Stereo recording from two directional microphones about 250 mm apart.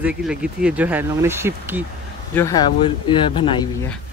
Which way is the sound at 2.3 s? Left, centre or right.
Centre.